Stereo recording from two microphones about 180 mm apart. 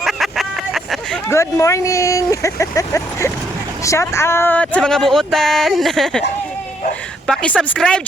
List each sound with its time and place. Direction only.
0.0 s a sound: centre (ahead or behind)
1.3 s speech: 15° left (ahead or behind)
7.3 s speech: 5° left (ahead or behind)